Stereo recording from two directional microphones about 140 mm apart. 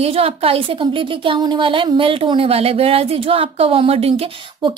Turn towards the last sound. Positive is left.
turn(degrees=-40)  # may be behind; listen again after turning